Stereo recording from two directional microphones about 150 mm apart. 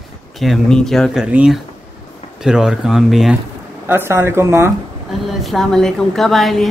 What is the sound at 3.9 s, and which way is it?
Speech, 15° right (ahead or behind).